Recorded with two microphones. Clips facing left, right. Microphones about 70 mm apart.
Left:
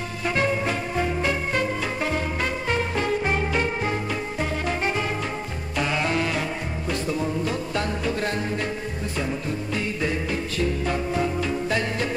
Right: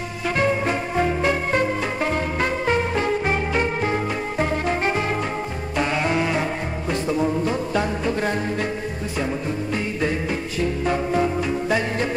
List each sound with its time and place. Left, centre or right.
0.4 s music: centre
10.9 s music: centre